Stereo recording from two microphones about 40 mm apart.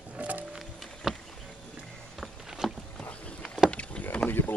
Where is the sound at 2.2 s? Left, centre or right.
Centre.